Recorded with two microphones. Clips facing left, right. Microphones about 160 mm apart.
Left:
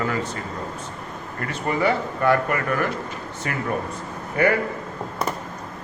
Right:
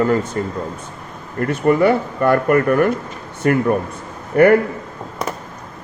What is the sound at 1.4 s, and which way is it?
A man's voice, 55° right (ahead or behind).